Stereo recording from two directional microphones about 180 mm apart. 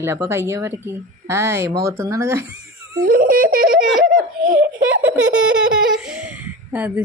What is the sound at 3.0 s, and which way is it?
A child's voice, 50° right (ahead or behind).